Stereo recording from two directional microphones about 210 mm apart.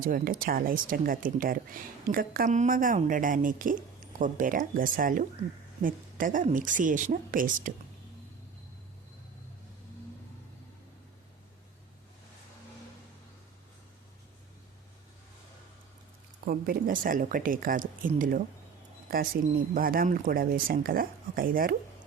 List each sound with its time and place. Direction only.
0.0 s a woman's voice: 40° right (ahead or behind)
16.5 s a woman's voice: 45° right (ahead or behind)
19.7 s speech: 45° right (ahead or behind)